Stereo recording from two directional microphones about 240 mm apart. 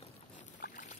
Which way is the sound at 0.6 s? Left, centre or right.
Left.